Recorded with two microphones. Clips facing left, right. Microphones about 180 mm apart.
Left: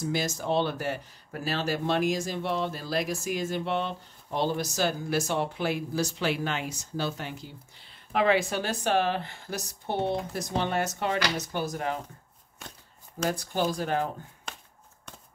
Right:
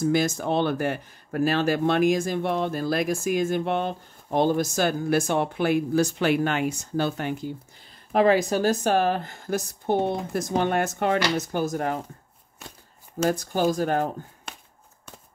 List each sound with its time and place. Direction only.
0.0 s speech: 55° right (ahead or behind)
13.3 s speech: 45° right (ahead or behind)